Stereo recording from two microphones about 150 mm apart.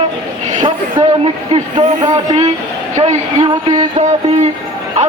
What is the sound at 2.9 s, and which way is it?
Speech, 50° right (ahead or behind).